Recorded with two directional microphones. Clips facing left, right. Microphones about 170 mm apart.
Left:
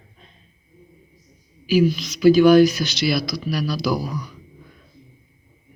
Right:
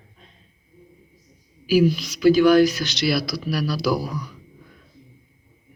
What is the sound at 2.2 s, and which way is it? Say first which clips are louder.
Speech: left 2 dB; 15° left (ahead or behind).